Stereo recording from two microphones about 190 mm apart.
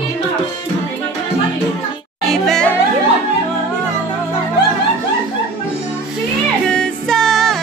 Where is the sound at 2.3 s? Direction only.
Centre (ahead or behind).